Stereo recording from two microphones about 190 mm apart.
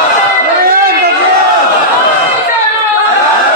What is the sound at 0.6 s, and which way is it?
Chatter, 50° right (ahead or behind).